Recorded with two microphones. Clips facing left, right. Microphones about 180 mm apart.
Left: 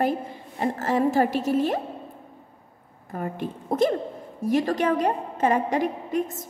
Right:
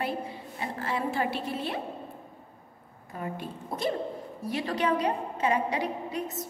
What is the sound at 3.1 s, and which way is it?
A woman's voice, 50° left (ahead or behind).